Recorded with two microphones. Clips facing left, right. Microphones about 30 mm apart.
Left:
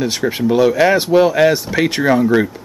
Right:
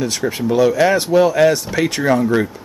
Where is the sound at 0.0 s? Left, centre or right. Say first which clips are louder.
Left 2 dB; centre.